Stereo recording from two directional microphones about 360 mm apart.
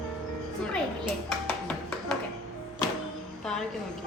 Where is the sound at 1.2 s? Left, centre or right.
Centre.